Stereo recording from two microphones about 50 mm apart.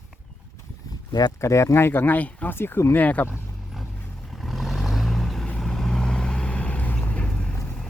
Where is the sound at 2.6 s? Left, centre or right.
Left.